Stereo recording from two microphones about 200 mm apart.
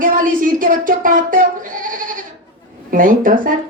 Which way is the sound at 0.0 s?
45° right (ahead or behind).